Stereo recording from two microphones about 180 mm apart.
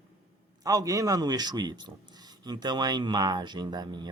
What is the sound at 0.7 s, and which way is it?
Speech, 20° right (ahead or behind).